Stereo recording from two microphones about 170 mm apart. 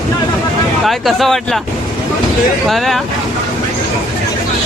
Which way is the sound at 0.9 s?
Centre (ahead or behind).